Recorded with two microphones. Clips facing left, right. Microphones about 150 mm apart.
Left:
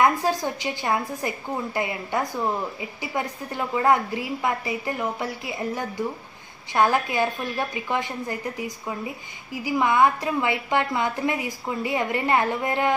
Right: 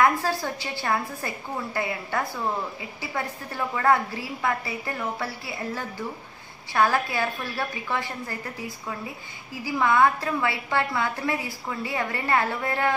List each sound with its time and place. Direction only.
0.0 s a woman's voice: 15° left (ahead or behind)